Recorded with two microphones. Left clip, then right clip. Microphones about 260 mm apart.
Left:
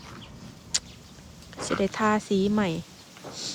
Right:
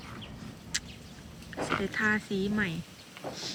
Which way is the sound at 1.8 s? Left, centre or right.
Centre.